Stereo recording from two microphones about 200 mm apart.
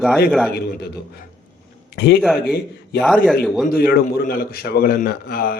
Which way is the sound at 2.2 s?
Centre (ahead or behind).